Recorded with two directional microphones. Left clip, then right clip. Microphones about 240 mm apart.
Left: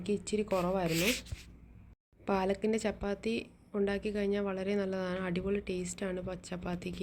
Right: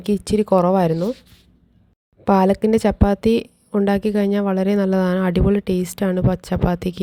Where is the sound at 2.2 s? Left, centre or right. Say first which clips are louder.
Right 15 dB; right.